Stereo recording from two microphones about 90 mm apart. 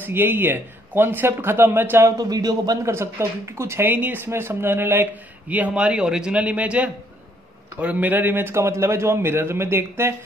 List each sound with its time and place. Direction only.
0.0 s speech: 25° right (ahead or behind)
2.1 s a man's voice: 45° right (ahead or behind)
2.8 s speech: 30° right (ahead or behind)